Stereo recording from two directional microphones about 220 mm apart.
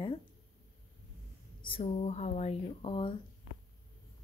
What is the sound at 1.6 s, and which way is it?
A woman's voice, 25° left (ahead or behind).